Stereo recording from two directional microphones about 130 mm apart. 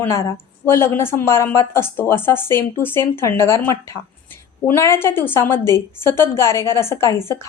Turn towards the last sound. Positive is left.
turn(degrees=20)  # may be behind; listen again after turning